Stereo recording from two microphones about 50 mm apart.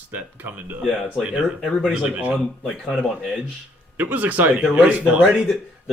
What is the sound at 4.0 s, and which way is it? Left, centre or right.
Speech, right.